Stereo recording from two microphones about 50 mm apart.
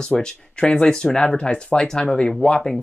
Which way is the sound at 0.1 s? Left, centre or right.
Centre.